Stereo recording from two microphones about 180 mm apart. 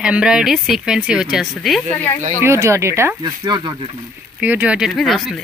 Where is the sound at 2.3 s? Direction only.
15° right (ahead or behind).